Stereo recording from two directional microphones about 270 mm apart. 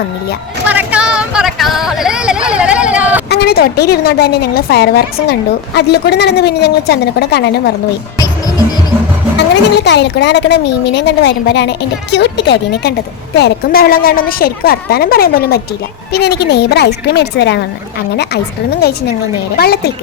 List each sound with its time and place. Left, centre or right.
0.7 s speech: centre
3.2 s a woman's voice: left
9.7 s a woman's voice: left
18.7 s a woman's voice: left